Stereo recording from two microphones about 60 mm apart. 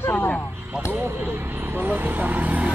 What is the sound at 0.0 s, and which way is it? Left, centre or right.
Vehicle, left.